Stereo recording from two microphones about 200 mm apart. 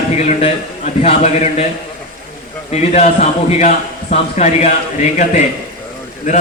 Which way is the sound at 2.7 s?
35° left (ahead or behind).